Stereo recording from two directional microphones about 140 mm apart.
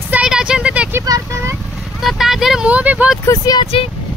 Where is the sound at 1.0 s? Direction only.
25° right (ahead or behind).